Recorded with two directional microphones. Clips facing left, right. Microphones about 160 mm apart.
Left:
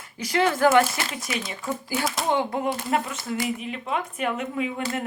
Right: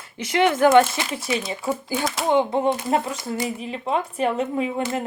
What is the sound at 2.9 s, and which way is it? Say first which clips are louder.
Speech: right 3 dB; 35° right (ahead or behind).